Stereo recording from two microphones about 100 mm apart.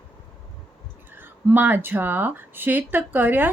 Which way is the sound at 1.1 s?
20° right (ahead or behind).